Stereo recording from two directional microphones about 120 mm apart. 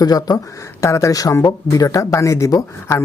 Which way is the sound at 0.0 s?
30° left (ahead or behind).